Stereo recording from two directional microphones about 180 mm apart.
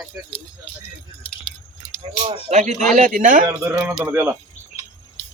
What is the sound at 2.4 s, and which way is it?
Speech, 40° right (ahead or behind).